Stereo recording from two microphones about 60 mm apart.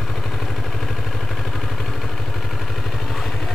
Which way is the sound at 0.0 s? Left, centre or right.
Centre.